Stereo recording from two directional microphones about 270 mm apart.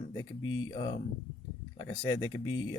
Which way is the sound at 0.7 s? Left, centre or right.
Centre.